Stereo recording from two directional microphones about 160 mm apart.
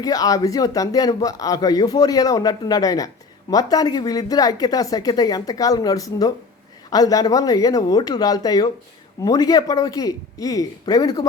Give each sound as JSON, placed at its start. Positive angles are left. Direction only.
{"t": 0.0, "sound": "speech", "side_deg": 20}